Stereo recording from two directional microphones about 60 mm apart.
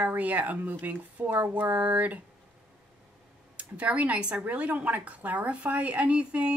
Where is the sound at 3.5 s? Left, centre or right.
Right.